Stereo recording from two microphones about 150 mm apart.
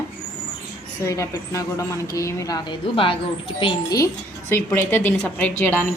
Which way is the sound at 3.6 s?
25° left (ahead or behind).